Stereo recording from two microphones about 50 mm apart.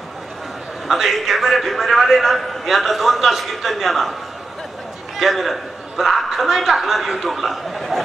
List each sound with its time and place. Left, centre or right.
0.8 s a man's voice: centre
5.1 s a man's voice: centre